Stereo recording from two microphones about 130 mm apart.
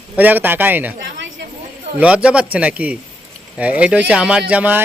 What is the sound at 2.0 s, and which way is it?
A man's voice, 10° right (ahead or behind).